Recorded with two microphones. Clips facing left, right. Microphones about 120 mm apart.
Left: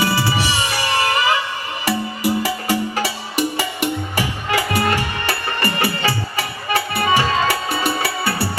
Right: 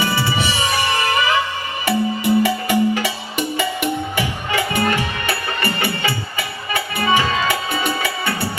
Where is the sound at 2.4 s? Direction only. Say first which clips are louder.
Right 4 dB; 35° left (ahead or behind).